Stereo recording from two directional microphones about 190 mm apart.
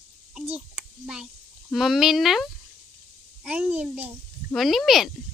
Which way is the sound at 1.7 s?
Centre (ahead or behind).